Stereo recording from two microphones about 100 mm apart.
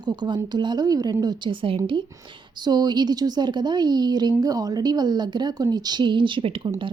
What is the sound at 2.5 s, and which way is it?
A woman's voice, 45° right (ahead or behind).